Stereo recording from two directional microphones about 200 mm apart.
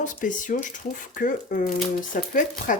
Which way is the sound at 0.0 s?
40° left (ahead or behind).